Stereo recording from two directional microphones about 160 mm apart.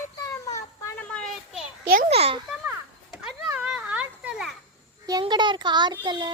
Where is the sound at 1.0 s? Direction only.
5° left (ahead or behind).